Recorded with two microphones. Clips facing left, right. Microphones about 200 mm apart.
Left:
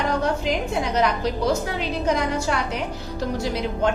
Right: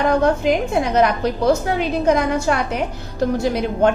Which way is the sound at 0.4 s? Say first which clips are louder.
Right 6 dB; 55° right (ahead or behind).